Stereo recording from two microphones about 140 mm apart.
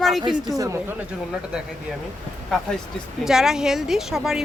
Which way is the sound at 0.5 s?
25° right (ahead or behind).